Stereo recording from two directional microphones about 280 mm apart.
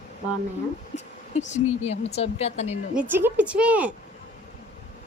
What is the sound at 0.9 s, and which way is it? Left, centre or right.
Speech, left.